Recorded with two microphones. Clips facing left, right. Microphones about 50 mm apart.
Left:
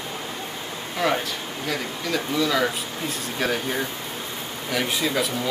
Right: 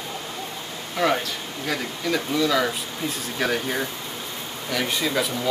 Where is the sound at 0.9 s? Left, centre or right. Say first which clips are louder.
Right 1 dB; centre.